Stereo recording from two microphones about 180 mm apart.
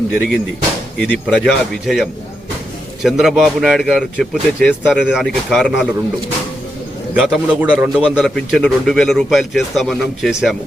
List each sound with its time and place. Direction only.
0.1 s a man's voice: 5° left (ahead or behind)
7.2 s a man's voice: 5° right (ahead or behind)